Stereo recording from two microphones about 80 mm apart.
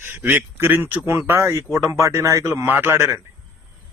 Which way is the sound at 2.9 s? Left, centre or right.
Right.